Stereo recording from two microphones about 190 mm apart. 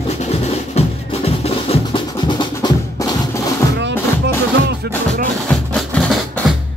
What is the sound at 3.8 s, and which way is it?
Music, 65° right (ahead or behind).